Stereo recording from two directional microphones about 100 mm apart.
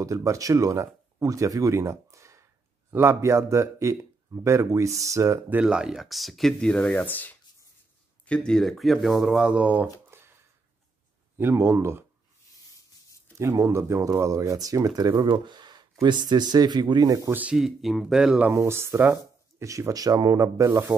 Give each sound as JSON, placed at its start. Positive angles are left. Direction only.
{"t": 0.0, "sound": "speech", "side_deg": -35}
{"t": 5.6, "sound": "speech", "side_deg": -10}
{"t": 10.1, "sound": "a sound", "side_deg": -25}
{"t": 11.3, "sound": "speech", "side_deg": -25}
{"t": 13.4, "sound": "speech", "side_deg": -30}
{"t": 17.3, "sound": "speech", "side_deg": -15}
{"t": 17.6, "sound": "speech", "side_deg": -5}
{"t": 18.5, "sound": "speech", "side_deg": -25}